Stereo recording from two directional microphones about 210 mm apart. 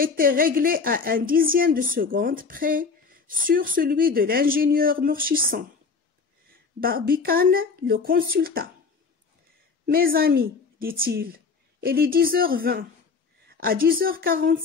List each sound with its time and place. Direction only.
0.0 s speech: 45° right (ahead or behind)
6.8 s speech: 45° right (ahead or behind)
9.8 s a woman's voice: 45° right (ahead or behind)